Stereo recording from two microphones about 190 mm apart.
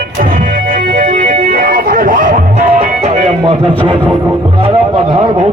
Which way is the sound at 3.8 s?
25° right (ahead or behind).